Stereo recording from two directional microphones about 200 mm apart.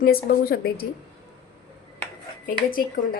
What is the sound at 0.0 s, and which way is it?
Speech, 50° left (ahead or behind).